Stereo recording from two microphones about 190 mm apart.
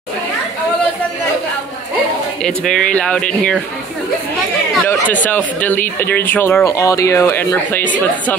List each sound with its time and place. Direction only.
2.4 s speech: 5° left (ahead or behind)
5.2 s speech: 10° left (ahead or behind)